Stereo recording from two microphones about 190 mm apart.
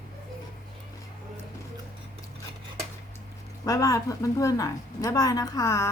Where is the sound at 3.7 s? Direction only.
20° left (ahead or behind).